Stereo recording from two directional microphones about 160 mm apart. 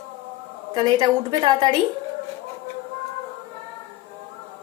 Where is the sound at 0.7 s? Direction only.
25° right (ahead or behind).